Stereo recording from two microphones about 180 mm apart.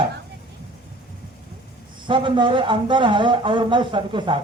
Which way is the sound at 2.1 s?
25° right (ahead or behind).